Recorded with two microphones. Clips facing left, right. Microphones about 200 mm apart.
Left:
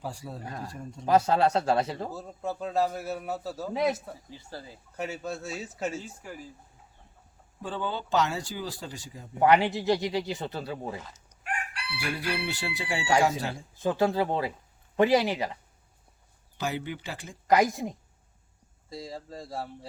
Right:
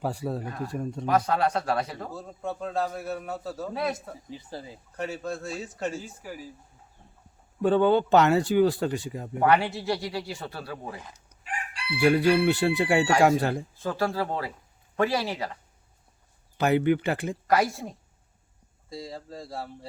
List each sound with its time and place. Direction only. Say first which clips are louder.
0.0 s speech: right 8 dB; 60° right (ahead or behind)
1.0 s speech: left 2 dB; 25° left (ahead or behind)
2.1 s a man's voice: even; 5° left (ahead or behind)
3.7 s speech: left 3 dB; 15° left (ahead or behind)
4.3 s speech: right 4 dB; 20° right (ahead or behind)
4.9 s a man's voice: right 2 dB; centre (ahead or behind)
7.6 s speech: right 13 dB; 60° right (ahead or behind)
9.4 s speech: left 1 dB; 20° left (ahead or behind)
11.9 s speech: right 12 dB; 60° right (ahead or behind)
13.7 s speech: left 3 dB; 20° left (ahead or behind)
16.6 s speech: right 11 dB; 60° right (ahead or behind)
17.5 s speech: left 2 dB; 15° left (ahead or behind)
18.9 s a man's voice: right 1 dB; centre (ahead or behind)